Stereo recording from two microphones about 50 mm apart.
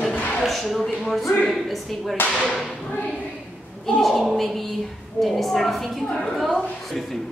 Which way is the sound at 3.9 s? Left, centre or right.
Centre.